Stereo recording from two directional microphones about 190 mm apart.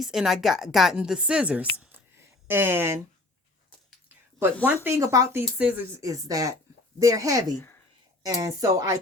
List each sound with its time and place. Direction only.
0.0 s a woman's voice: centre (ahead or behind)
1.8 s a sound: 10° right (ahead or behind)
4.6 s speech: 10° right (ahead or behind)